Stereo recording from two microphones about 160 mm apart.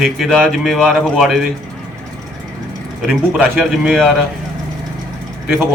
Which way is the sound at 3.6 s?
Centre (ahead or behind).